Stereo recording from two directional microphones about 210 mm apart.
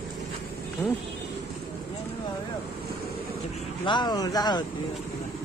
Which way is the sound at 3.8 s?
20° left (ahead or behind).